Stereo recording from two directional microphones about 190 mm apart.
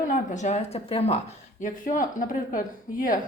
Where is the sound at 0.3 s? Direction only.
40° left (ahead or behind).